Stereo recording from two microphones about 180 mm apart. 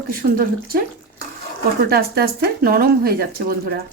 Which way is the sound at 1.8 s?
60° right (ahead or behind).